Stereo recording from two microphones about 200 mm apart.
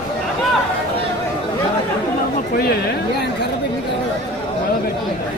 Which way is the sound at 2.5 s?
50° left (ahead or behind).